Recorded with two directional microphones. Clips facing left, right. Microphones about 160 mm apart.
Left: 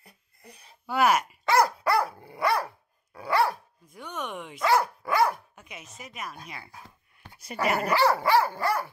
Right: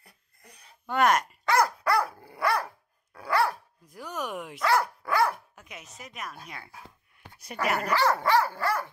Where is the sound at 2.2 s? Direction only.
Centre (ahead or behind).